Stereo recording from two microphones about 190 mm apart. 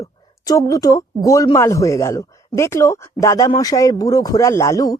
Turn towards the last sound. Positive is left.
turn(degrees=20)  # may be behind; listen again after turning